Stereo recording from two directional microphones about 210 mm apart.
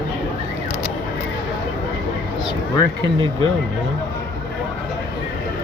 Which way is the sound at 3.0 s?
25° right (ahead or behind).